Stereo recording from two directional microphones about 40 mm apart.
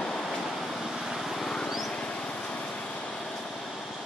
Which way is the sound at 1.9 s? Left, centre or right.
Left.